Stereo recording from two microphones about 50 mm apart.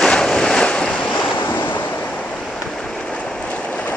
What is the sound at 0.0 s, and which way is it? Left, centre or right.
Vehicle, centre.